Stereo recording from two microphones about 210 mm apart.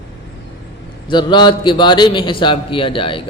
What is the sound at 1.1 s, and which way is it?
A man's voice, 20° left (ahead or behind).